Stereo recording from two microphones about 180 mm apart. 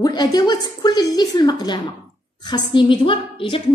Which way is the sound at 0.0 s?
20° left (ahead or behind).